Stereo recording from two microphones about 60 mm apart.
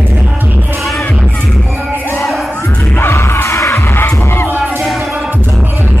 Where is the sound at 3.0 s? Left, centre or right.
Left.